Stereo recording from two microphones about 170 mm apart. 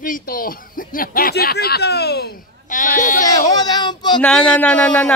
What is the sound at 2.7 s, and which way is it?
Speech, 50° left (ahead or behind).